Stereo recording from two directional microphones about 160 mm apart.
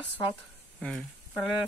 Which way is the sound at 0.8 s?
5° left (ahead or behind).